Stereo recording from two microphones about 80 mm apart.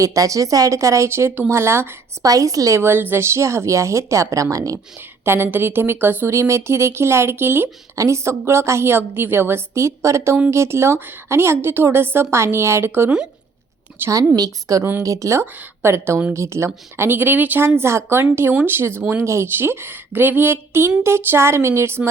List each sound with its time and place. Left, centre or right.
0.0 s a woman's voice: right
2.2 s a woman's voice: right
2.8 s a woman's voice: right
4.9 s a woman's voice: right
14.3 s a woman's voice: right
17.7 s a woman's voice: right